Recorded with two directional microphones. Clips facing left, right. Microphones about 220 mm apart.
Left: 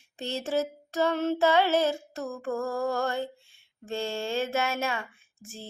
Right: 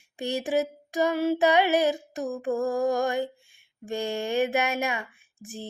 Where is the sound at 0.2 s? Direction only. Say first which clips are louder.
Right 3 dB; 15° right (ahead or behind).